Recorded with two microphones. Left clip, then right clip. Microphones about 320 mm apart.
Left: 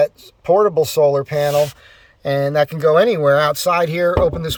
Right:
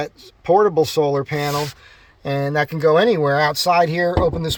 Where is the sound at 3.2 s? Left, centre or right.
Centre.